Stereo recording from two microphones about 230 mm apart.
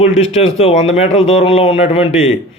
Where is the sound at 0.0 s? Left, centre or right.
Left.